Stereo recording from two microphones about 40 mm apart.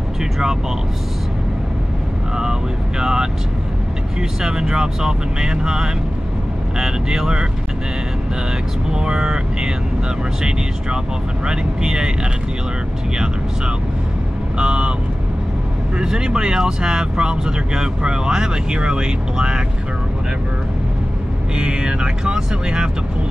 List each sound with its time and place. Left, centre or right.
3.0 s speech: centre
8.9 s speech: centre
11.4 s speech: right
14.6 s speech: right
16.0 s speech: centre
21.5 s speech: right